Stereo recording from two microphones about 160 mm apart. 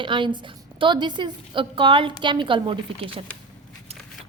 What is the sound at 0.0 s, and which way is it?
A woman's voice, 30° right (ahead or behind).